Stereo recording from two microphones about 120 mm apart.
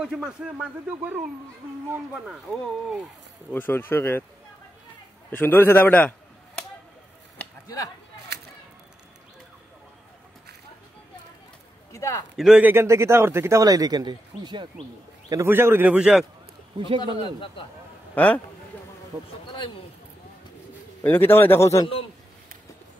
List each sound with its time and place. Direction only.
0.0 s speech: 5° right (ahead or behind)
3.5 s speech: 15° left (ahead or behind)
5.3 s speech: 15° left (ahead or behind)
7.6 s speech: 30° left (ahead or behind)
11.9 s a man's voice: 25° left (ahead or behind)
12.4 s a man's voice: centre (ahead or behind)
12.6 s speech: 20° right (ahead or behind); by 14.7 s 40° right (ahead or behind)
15.2 s speech: 25° right (ahead or behind)
17.2 s a man's voice: 45° left (ahead or behind)
18.1 s speech: 10° left (ahead or behind)
21.0 s speech: 20° left (ahead or behind)